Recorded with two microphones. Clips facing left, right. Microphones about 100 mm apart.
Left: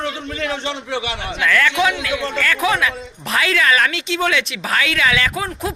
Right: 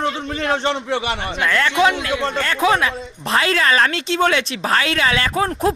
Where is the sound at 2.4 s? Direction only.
30° right (ahead or behind).